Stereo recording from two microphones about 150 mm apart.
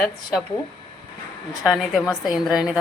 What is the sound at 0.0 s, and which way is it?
Speech, centre (ahead or behind).